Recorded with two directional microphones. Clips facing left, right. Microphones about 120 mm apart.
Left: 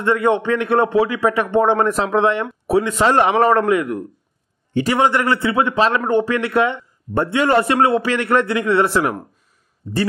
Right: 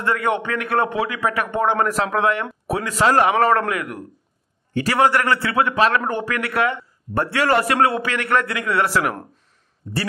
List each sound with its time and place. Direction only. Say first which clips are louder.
0.0 s a man's voice: left 5 dB; 25° left (ahead or behind)